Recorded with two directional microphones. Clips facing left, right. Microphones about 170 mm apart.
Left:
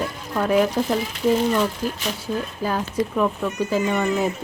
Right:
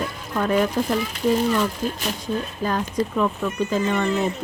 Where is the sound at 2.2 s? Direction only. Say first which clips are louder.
Even; 10° left (ahead or behind).